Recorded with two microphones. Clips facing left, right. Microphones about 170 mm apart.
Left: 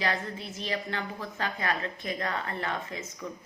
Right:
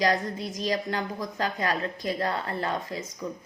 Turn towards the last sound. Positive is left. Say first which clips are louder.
# right 4 dB
turn(degrees=-35)  # may be behind; listen again after turning